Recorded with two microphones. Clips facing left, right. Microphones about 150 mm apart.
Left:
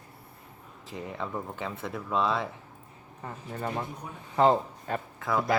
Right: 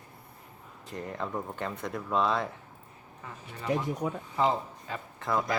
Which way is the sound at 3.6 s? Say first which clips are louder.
Right 6 dB; 90° right.